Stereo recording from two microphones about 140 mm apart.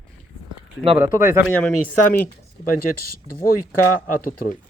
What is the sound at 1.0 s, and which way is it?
Speech, 15° right (ahead or behind).